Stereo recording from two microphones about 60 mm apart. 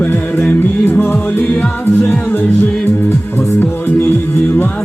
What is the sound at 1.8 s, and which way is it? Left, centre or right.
Music, left.